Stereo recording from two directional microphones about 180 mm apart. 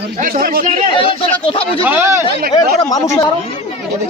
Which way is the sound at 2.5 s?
20° left (ahead or behind).